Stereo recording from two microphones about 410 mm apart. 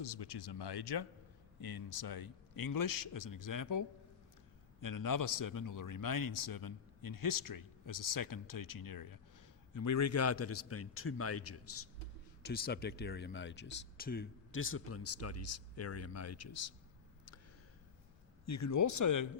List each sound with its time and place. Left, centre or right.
0.0 s a man's voice: left
9.7 s a man's voice: left
12.4 s speech: left
18.4 s a man's voice: left